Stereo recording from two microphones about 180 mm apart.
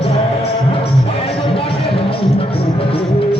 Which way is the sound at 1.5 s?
30° left (ahead or behind).